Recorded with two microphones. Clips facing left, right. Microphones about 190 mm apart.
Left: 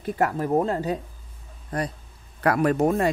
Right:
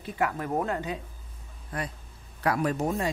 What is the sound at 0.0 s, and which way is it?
Speech, 45° left (ahead or behind).